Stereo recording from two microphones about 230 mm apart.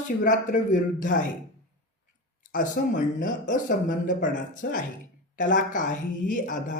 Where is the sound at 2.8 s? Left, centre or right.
Left.